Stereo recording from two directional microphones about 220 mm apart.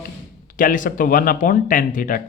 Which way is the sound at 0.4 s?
40° left (ahead or behind).